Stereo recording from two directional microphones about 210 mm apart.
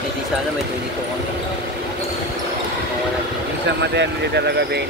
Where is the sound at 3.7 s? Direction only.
55° right (ahead or behind).